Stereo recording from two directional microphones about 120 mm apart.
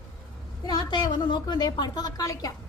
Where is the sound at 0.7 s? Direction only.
40° left (ahead or behind).